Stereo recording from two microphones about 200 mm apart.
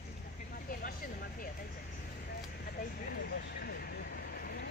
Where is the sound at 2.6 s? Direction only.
50° left (ahead or behind).